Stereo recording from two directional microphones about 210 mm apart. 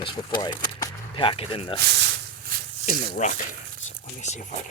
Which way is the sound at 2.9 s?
35° left (ahead or behind).